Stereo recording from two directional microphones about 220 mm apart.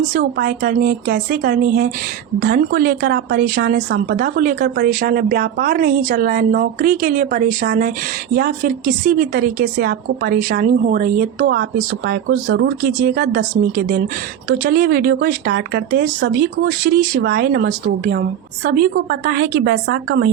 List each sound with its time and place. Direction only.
0.1 s a woman's voice: 40° right (ahead or behind)